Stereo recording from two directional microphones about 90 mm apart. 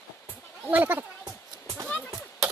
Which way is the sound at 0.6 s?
20° right (ahead or behind).